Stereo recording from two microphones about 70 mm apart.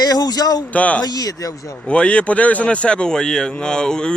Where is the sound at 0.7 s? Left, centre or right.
Centre.